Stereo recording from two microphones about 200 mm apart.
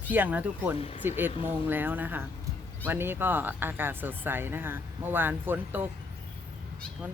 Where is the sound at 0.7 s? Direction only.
30° left (ahead or behind).